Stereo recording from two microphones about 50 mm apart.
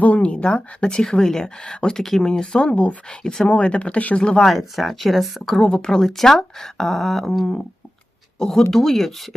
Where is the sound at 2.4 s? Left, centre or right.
Left.